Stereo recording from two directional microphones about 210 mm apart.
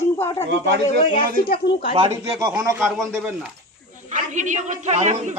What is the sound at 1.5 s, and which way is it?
Speech, 45° left (ahead or behind).